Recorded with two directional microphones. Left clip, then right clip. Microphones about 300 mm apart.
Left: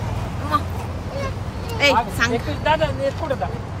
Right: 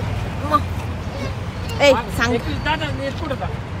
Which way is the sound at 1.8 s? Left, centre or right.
Centre.